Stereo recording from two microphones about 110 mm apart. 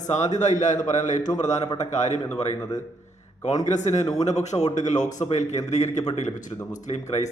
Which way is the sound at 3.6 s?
90° left.